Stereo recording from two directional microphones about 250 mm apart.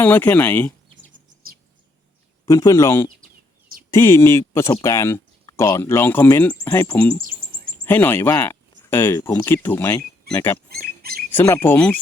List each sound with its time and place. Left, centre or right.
0.0 s speech: centre
2.5 s speech: centre
10.7 s a sound: right
11.3 s speech: centre